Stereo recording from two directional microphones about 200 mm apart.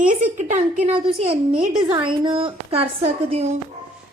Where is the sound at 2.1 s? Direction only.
25° right (ahead or behind).